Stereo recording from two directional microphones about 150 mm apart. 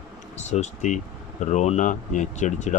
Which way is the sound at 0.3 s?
50° left (ahead or behind).